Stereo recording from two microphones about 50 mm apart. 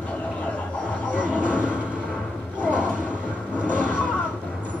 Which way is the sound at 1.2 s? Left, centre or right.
Right.